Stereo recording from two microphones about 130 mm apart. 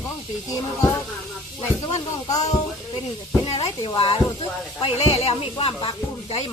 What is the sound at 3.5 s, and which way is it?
Speech, 50° left (ahead or behind).